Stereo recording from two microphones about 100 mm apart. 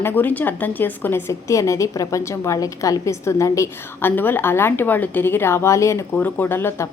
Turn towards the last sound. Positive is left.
turn(degrees=25)  # may be behind; listen again after turning